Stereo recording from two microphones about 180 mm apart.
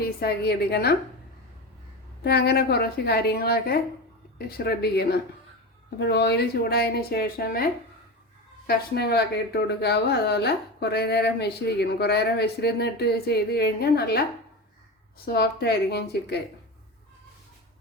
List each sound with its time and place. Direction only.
0.0 s speech: 60° left (ahead or behind)
2.2 s speech: 65° left (ahead or behind)
8.6 s speech: 65° left (ahead or behind)
15.3 s speech: 65° left (ahead or behind)